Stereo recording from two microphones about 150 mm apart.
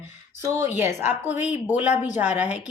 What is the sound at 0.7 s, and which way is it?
A woman's voice, 15° right (ahead or behind).